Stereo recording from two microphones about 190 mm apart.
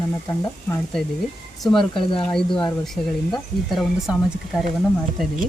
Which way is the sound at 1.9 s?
25° left (ahead or behind).